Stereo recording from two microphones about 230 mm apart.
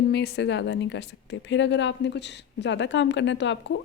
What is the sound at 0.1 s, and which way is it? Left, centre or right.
A woman's voice, left.